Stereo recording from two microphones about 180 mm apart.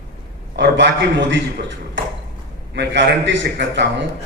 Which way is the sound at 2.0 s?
90° right.